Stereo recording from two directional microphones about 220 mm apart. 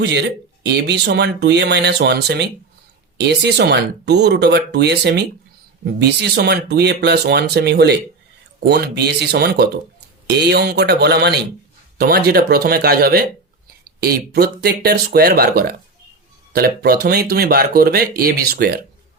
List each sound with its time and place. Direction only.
0.0 s speech: 50° right (ahead or behind)